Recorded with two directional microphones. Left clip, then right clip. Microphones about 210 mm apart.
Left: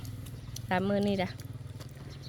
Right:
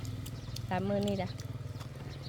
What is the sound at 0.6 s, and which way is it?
Speech, 40° left (ahead or behind).